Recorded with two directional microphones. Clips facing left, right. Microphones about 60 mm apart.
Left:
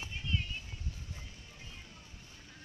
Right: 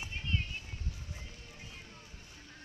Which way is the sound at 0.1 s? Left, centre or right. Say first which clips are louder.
Even; right.